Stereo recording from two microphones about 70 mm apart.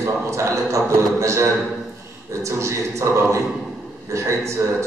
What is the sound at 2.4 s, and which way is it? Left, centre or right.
A man's voice, right.